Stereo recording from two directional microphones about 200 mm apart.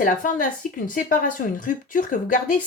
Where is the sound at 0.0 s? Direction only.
40° left (ahead or behind).